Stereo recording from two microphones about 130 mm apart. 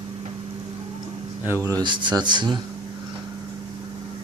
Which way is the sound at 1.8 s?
35° right (ahead or behind).